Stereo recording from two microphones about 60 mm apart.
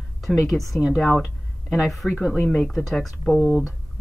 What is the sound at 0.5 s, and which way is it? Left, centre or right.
Speech, centre.